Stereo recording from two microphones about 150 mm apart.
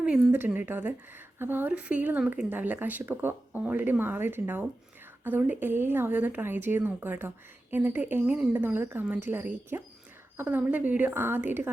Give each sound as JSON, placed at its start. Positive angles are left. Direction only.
{"t": 0.0, "sound": "a woman's voice", "side_deg": -10}